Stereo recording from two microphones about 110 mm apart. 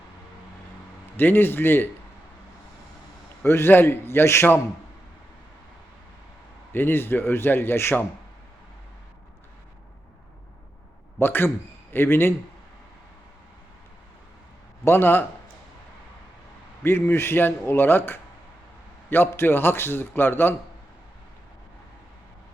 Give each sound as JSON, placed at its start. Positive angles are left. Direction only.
{"t": 1.1, "sound": "a man's voice", "side_deg": 20}
{"t": 3.4, "sound": "a man's voice", "side_deg": 20}
{"t": 6.7, "sound": "a man's voice", "side_deg": 20}
{"t": 11.2, "sound": "a man's voice", "side_deg": 20}
{"t": 14.8, "sound": "a man's voice", "side_deg": 20}
{"t": 16.8, "sound": "a man's voice", "side_deg": 20}